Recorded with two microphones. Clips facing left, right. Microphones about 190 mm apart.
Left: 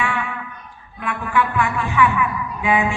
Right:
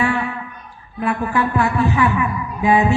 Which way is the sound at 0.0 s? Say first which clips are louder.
Right 5 dB; 40° right (ahead or behind).